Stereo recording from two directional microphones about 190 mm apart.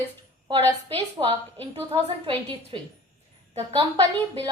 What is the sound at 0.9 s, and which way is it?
A woman's voice, 30° right (ahead or behind).